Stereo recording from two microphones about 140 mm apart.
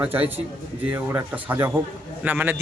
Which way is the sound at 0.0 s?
10° right (ahead or behind).